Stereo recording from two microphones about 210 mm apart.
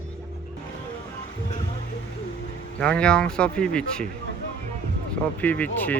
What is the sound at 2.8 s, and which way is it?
Speech, 5° left (ahead or behind).